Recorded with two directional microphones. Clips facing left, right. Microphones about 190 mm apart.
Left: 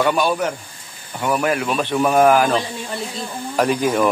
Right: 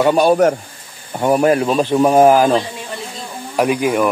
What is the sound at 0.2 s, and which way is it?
A man's voice, 45° right (ahead or behind).